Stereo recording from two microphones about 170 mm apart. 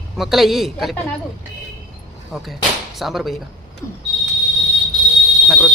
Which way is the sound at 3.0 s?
Centre (ahead or behind).